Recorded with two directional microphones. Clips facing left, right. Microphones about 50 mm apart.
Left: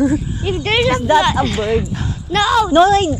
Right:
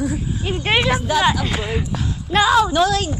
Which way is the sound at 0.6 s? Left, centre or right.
Centre.